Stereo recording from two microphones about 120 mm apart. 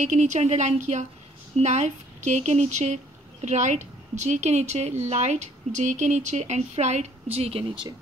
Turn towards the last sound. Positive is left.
turn(degrees=-50)  # may be behind; listen again after turning